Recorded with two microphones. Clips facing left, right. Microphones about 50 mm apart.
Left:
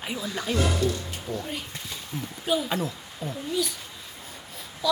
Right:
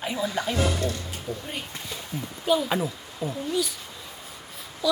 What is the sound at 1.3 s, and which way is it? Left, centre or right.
A woman's voice, centre.